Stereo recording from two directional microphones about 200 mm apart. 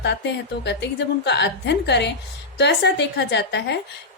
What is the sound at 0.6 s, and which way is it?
Speech, 60° left (ahead or behind).